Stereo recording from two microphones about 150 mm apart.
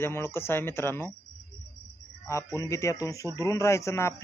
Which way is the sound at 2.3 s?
20° left (ahead or behind).